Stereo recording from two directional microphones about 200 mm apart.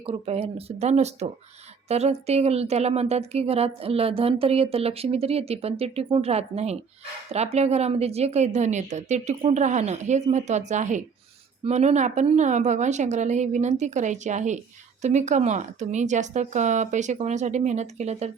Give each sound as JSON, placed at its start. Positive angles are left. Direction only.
{"t": 0.0, "sound": "speech", "side_deg": -30}